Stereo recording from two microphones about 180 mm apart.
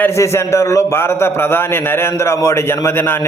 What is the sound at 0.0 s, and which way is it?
A man's voice, 15° left (ahead or behind).